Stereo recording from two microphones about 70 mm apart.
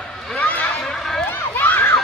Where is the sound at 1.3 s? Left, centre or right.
Left.